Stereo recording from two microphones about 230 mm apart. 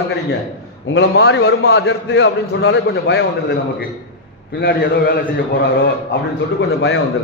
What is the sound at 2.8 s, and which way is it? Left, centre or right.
A man's voice, left.